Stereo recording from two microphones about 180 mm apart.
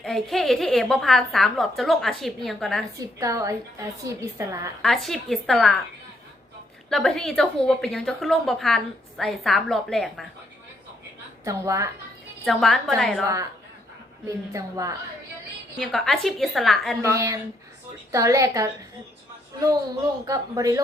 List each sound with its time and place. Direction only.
0.0 s a woman's voice: centre (ahead or behind)
3.2 s a woman's voice: 20° right (ahead or behind)
4.8 s a woman's voice: centre (ahead or behind)
6.9 s a woman's voice: 5° left (ahead or behind)
11.4 s a woman's voice: 15° right (ahead or behind)
12.5 s a woman's voice: centre (ahead or behind)
14.3 s a woman's voice: 15° right (ahead or behind)
15.8 s a woman's voice: centre (ahead or behind)
17.0 s a woman's voice: 15° right (ahead or behind)
20.2 s a man's voice: 20° right (ahead or behind)